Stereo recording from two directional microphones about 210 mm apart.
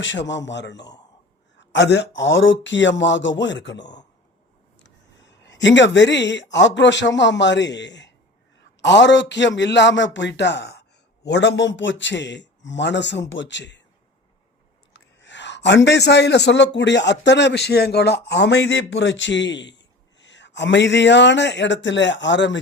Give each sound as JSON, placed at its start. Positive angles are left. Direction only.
{"t": 0.0, "sound": "a man's voice", "side_deg": 60}
{"t": 14.9, "sound": "a man's voice", "side_deg": 60}